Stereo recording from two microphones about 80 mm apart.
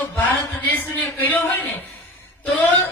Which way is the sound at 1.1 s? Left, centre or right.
Left.